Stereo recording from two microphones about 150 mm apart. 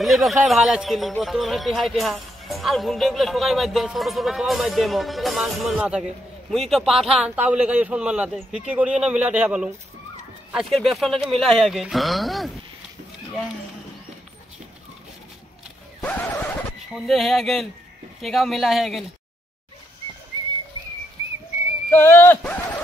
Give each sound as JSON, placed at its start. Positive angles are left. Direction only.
{"t": 0.0, "sound": "a man's voice", "side_deg": 0}
{"t": 16.0, "sound": "neigh", "side_deg": 10}
{"t": 16.9, "sound": "speech", "side_deg": 0}
{"t": 21.9, "sound": "speech", "side_deg": 15}